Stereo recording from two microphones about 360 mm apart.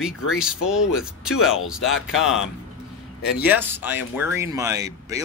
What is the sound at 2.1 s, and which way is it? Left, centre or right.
Speech, centre.